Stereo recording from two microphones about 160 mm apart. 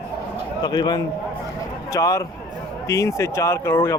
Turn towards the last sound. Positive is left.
turn(degrees=15)  # may be behind; listen again after turning